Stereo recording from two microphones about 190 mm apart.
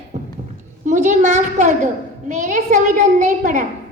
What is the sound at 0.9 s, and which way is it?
A child's voice, 40° right (ahead or behind).